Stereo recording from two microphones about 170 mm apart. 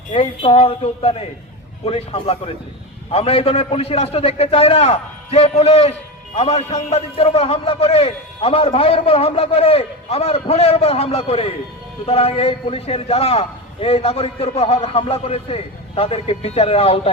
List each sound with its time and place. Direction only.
0.1 s a man's voice: 35° left (ahead or behind)